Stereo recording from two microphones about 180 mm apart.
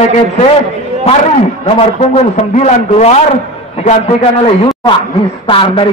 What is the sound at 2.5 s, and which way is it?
Speech, 35° left (ahead or behind).